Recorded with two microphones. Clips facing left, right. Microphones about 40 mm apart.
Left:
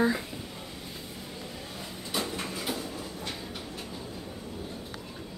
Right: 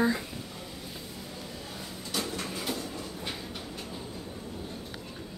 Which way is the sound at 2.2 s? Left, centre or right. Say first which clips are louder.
Even; centre.